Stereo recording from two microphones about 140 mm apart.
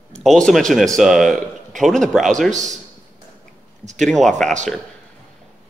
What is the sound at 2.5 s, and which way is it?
Speech, 60° right (ahead or behind).